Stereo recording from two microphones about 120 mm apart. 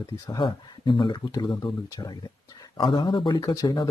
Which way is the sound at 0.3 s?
40° left (ahead or behind).